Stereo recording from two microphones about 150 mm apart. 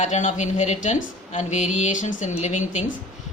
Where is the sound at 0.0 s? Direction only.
50° left (ahead or behind).